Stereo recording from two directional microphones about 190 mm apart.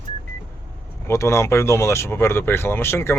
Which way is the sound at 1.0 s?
15° left (ahead or behind).